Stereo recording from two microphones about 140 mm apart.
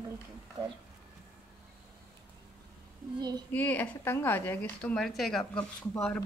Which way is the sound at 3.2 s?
30° right (ahead or behind).